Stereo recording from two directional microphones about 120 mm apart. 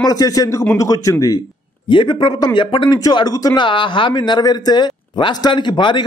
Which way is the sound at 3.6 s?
45° left (ahead or behind).